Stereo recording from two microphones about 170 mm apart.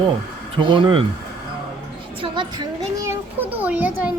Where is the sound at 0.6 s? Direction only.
30° right (ahead or behind).